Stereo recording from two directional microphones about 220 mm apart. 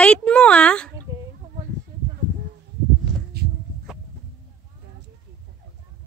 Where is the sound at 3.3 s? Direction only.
45° right (ahead or behind).